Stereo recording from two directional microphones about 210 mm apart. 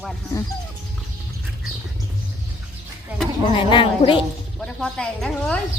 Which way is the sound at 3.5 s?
25° left (ahead or behind).